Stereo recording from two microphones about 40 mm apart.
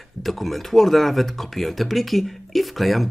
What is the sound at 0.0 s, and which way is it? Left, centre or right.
Speech, centre.